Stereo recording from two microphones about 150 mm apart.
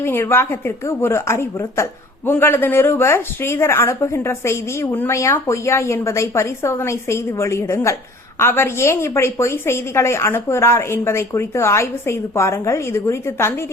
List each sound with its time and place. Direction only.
0.0 s a woman's voice: 15° left (ahead or behind)